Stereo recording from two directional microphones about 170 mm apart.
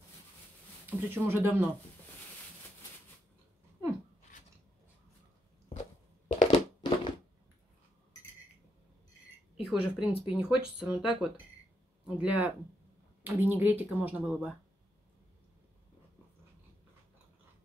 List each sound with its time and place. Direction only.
0.8 s speech: 10° right (ahead or behind)
6.2 s a sound: 30° left (ahead or behind)
9.6 s speech: centre (ahead or behind)